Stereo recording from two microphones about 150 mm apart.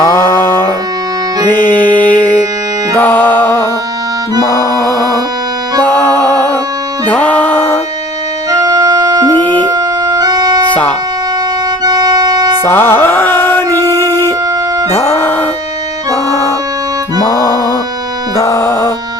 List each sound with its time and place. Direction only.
0.0 s music: 20° left (ahead or behind)
5.8 s music: 10° left (ahead or behind)
8.4 s organ: 25° right (ahead or behind)
9.3 s music: 10° left (ahead or behind)
9.6 s organ: 30° right (ahead or behind)
11.9 s organ: 25° right (ahead or behind)
12.6 s music: 15° left (ahead or behind)
17.3 s music: 25° left (ahead or behind)